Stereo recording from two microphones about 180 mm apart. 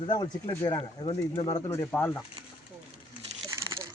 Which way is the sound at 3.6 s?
20° right (ahead or behind).